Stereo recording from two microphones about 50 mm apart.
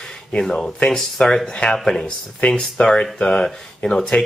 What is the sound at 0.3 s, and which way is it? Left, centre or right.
Speech, centre.